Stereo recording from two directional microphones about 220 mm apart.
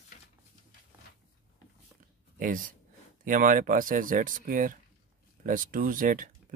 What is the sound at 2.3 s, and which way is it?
Speech, 40° right (ahead or behind).